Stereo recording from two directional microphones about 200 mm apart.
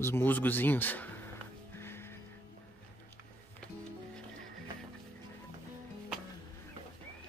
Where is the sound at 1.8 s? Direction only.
10° left (ahead or behind).